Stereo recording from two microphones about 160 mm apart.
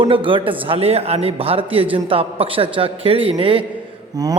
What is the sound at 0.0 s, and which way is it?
A man's voice, 35° right (ahead or behind).